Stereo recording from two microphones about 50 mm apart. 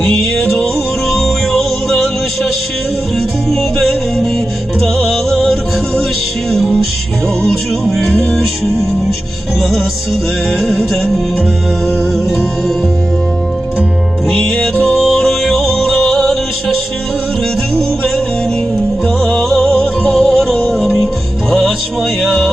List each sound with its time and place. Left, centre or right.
1.0 s music: centre
3.2 s music: centre
7.9 s music: centre
14.5 s music: left
15.3 s music: centre
19.5 s music: left
20.7 s music: centre